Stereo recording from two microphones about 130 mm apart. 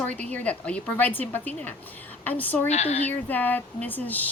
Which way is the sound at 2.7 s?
55° left (ahead or behind).